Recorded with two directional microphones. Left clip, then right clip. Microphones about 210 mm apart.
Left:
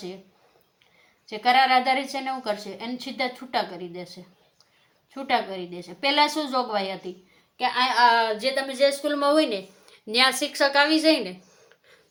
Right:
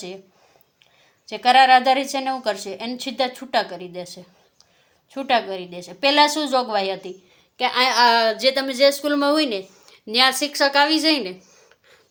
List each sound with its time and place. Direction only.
1.3 s a woman's voice: 45° right (ahead or behind); by 11.3 s 25° right (ahead or behind)